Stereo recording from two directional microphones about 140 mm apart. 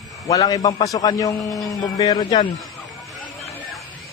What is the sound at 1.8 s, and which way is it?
Speech, 30° left (ahead or behind).